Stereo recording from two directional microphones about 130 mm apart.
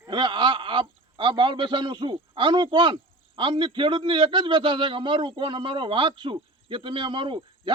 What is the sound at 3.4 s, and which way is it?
Speech, 40° right (ahead or behind).